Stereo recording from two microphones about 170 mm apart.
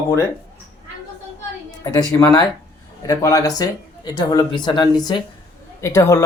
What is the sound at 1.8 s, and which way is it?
Speech, 15° left (ahead or behind).